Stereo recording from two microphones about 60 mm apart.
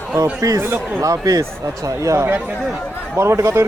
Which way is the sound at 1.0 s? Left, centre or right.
Right.